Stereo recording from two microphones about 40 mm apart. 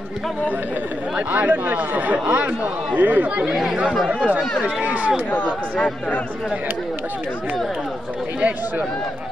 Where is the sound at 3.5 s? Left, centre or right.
Centre.